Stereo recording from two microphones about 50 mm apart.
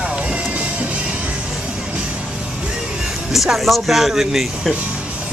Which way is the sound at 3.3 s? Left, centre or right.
Centre.